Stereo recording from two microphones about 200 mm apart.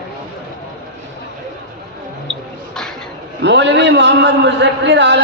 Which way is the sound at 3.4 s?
60° right (ahead or behind).